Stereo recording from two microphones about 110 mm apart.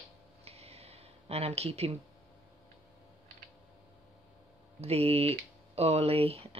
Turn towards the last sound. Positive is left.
turn(degrees=-65)  # may be behind; listen again after turning